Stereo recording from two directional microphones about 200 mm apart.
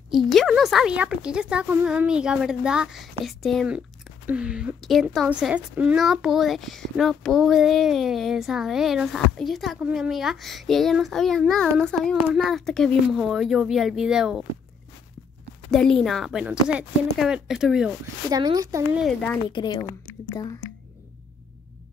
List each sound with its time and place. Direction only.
0.1 s speech: centre (ahead or behind)
15.7 s speech: centre (ahead or behind)
18.3 s speech: 20° right (ahead or behind)
18.9 s speech: centre (ahead or behind)
19.5 s speech: 20° left (ahead or behind)